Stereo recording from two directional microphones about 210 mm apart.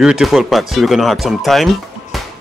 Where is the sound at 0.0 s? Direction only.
Centre (ahead or behind).